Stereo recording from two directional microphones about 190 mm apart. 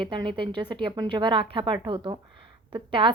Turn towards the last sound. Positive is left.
turn(degrees=-25)  # may be behind; listen again after turning